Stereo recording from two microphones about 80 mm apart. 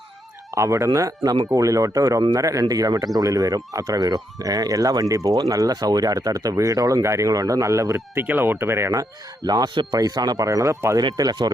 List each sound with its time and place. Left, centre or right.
0.5 s speech: right
8.1 s speech: right
11.0 s speech: right